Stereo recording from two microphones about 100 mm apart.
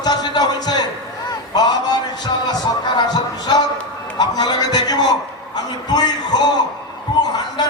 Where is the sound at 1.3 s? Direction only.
45° left (ahead or behind).